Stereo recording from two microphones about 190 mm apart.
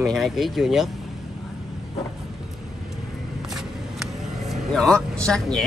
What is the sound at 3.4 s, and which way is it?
Vehicle, centre (ahead or behind).